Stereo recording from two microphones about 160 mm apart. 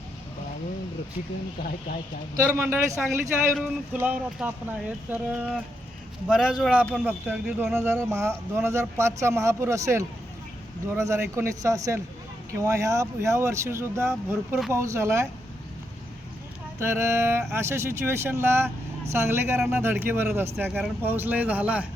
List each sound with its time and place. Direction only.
2.3 s a man's voice: 15° right (ahead or behind)
7.9 s speech: 15° right (ahead or behind)
16.8 s speech: 15° right (ahead or behind)